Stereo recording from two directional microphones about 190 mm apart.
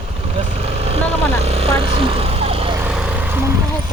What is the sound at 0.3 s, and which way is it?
Vehicle, 30° right (ahead or behind).